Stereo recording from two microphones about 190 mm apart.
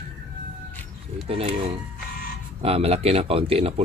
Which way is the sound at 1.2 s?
30° right (ahead or behind).